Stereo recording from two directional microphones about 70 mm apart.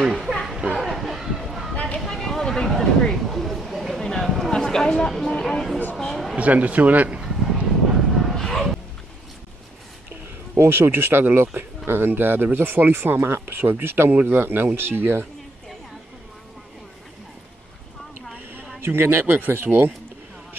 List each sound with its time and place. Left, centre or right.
0.0 s a sound: centre
6.3 s speech: right
7.2 s a sound: centre
8.1 s bow-wow: centre
10.5 s speech: right
18.8 s speech: right